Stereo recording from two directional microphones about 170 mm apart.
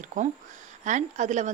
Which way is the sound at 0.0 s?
45° right (ahead or behind).